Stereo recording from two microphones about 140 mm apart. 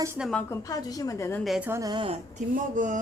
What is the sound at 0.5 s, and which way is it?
Speech, 25° left (ahead or behind).